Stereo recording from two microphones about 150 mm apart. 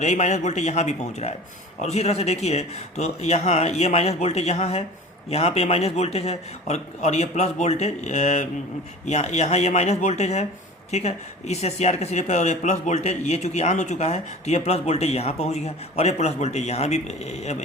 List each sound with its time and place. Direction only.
0.0 s speech: 50° left (ahead or behind)